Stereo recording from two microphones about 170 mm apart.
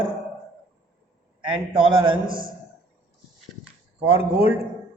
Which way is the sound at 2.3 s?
55° right (ahead or behind).